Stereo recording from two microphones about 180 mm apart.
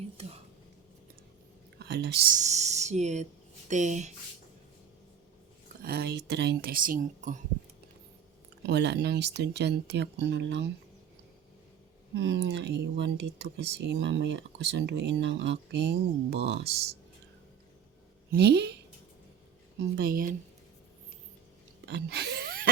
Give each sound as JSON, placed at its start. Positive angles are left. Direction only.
{"t": 1.8, "sound": "speech", "side_deg": -65}
{"t": 2.3, "sound": "speech", "side_deg": -40}
{"t": 5.8, "sound": "speech", "side_deg": -60}
{"t": 8.6, "sound": "speech", "side_deg": -70}
{"t": 12.1, "sound": "speech", "side_deg": -80}
{"t": 18.3, "sound": "a woman's voice", "side_deg": -65}
{"t": 20.0, "sound": "speech", "side_deg": -55}
{"t": 21.8, "sound": "a sound", "side_deg": -65}